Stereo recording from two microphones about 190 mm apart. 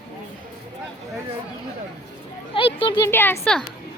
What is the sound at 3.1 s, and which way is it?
Speech, 10° left (ahead or behind).